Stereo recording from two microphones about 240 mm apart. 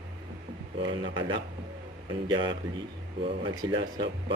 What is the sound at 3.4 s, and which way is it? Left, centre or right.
Speech, centre.